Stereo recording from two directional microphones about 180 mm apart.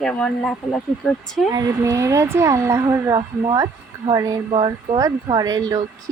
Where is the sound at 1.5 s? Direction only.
20° right (ahead or behind).